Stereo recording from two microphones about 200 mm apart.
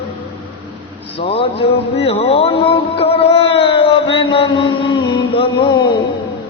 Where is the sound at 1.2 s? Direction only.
30° left (ahead or behind).